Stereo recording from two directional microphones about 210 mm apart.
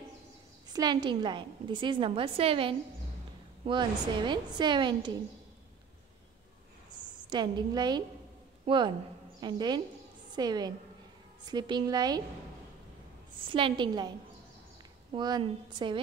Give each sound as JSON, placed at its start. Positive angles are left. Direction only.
{"t": 0.7, "sound": "a woman's voice", "side_deg": -20}
{"t": 7.2, "sound": "a woman's voice", "side_deg": -20}
{"t": 13.5, "sound": "a woman's voice", "side_deg": -25}
{"t": 15.1, "sound": "a woman's voice", "side_deg": -20}